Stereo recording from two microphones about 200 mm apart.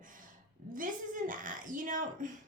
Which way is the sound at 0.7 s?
40° right (ahead or behind).